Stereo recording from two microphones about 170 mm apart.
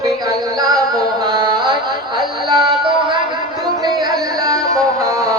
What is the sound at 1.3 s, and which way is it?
Carnatic music, 25° right (ahead or behind).